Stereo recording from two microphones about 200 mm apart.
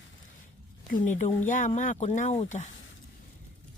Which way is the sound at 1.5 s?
40° left (ahead or behind).